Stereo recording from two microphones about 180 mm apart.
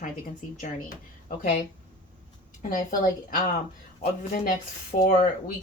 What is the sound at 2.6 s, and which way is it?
Speech, 50° left (ahead or behind).